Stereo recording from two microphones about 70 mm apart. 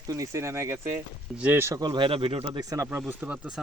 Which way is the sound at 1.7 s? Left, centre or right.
Right.